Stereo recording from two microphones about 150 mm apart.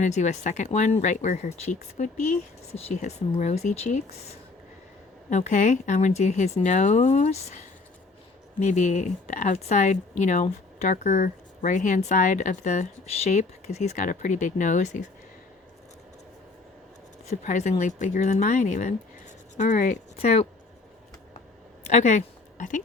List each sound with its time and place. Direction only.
0.0 s speech: 50° left (ahead or behind)
5.3 s speech: 55° left (ahead or behind)
17.2 s speech: 55° left (ahead or behind)
21.8 s speech: 50° left (ahead or behind)